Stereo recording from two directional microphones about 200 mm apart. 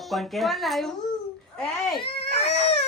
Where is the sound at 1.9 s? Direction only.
25° left (ahead or behind).